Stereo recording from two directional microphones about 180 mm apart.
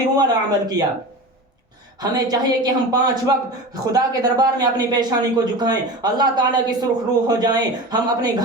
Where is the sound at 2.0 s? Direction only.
20° right (ahead or behind).